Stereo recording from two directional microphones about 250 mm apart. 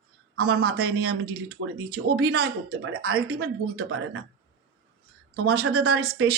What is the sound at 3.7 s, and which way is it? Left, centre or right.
Speech, right.